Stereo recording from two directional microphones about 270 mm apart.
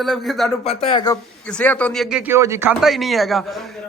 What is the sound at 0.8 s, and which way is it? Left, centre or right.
Speech, centre.